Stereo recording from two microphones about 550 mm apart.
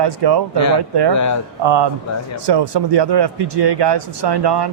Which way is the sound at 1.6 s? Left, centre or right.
Right.